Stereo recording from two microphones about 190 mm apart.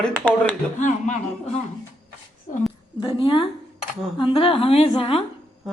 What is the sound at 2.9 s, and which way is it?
A woman's voice, 25° left (ahead or behind).